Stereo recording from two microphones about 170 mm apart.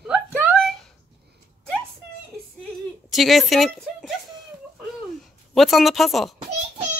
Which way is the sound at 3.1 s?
Centre (ahead or behind).